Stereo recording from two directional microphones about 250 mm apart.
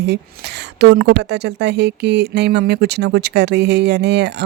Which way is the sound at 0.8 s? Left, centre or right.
Right.